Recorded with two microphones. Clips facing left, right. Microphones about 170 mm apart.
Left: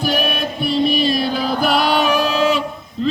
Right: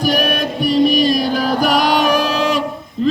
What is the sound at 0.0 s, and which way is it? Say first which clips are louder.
Music: right 3 dB; 15° right (ahead or behind).